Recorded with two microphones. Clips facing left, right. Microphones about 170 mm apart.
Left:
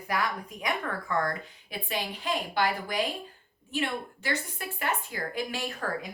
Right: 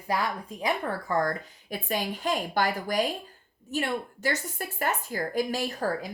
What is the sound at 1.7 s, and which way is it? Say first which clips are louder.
A woman's voice: right 4 dB; 45° right (ahead or behind).